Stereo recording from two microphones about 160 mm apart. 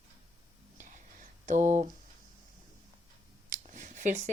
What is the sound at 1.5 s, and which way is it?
Speech, 50° right (ahead or behind).